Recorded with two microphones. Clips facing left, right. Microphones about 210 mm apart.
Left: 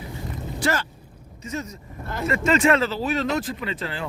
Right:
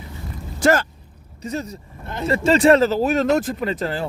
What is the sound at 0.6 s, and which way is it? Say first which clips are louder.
Speech: right 8 dB; 45° right (ahead or behind).